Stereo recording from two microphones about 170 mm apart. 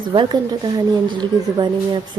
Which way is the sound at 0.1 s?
30° right (ahead or behind).